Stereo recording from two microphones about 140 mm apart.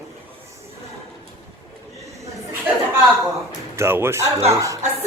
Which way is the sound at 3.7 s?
15° right (ahead or behind).